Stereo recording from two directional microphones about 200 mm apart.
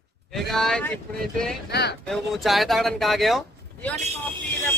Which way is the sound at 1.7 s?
55° left (ahead or behind).